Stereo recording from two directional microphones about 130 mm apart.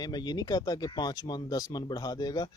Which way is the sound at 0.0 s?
30° left (ahead or behind).